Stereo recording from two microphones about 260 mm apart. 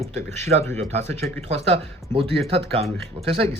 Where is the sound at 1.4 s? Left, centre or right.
Right.